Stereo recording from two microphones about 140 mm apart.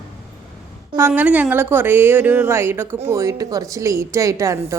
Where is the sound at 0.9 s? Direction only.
15° right (ahead or behind).